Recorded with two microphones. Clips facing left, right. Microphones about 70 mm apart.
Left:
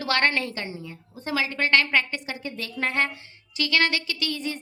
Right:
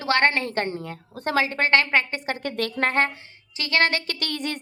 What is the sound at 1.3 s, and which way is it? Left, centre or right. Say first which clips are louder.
Speech: right 2 dB; right.